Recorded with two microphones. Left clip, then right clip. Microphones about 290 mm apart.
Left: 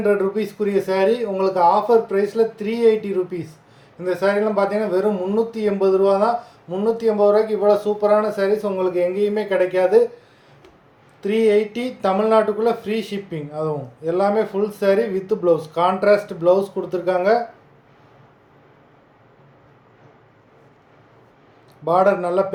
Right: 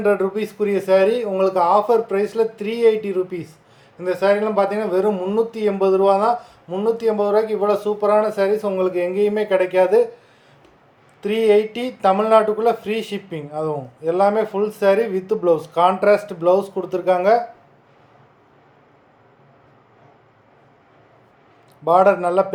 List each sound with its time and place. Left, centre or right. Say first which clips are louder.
0.0 s a man's voice: even; centre
11.2 s a man's voice: right 1 dB; centre
21.8 s a man's voice: right 2 dB; centre